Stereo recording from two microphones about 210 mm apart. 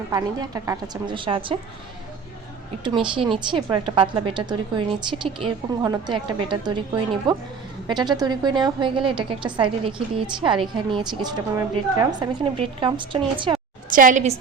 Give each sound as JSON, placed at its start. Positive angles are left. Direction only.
{"t": 0.1, "sound": "a woman's voice", "side_deg": -15}
{"t": 2.8, "sound": "a woman's voice", "side_deg": -25}
{"t": 13.9, "sound": "a woman's voice", "side_deg": -40}